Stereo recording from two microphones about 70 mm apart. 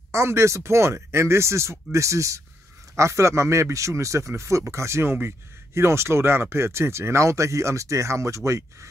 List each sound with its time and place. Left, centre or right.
0.1 s speech: right